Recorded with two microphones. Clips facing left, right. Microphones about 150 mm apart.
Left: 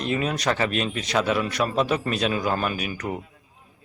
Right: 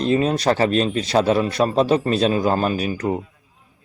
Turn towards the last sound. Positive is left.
turn(degrees=-30)  # may be behind; listen again after turning